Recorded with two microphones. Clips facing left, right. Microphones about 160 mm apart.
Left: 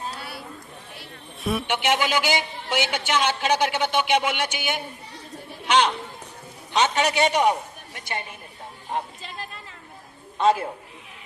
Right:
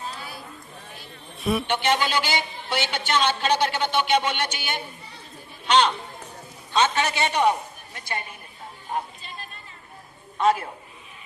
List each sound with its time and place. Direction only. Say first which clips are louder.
0.2 s a sound: left 1 dB; 65° left (ahead or behind)
1.4 s a man's voice: right 2 dB; centre (ahead or behind)
1.6 s a woman's voice: even; 10° left (ahead or behind)
10.3 s a man's voice: left 1 dB; 25° left (ahead or behind)